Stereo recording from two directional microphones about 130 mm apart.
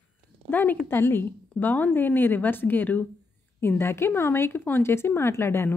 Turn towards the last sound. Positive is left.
turn(degrees=20)  # may be behind; listen again after turning